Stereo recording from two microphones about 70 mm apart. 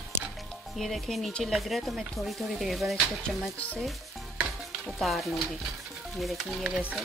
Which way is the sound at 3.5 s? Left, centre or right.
Centre.